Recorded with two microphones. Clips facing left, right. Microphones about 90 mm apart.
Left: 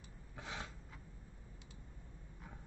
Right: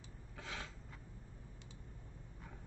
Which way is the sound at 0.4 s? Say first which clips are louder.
Left 1 dB; 15° left (ahead or behind).